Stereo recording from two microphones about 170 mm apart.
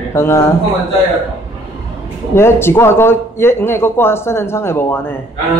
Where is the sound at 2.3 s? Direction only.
15° left (ahead or behind).